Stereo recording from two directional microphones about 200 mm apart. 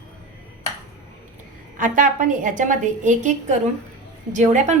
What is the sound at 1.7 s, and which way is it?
A woman's voice, 40° right (ahead or behind).